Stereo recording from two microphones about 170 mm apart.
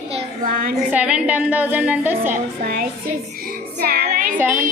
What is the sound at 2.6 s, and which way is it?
Music, 60° right (ahead or behind).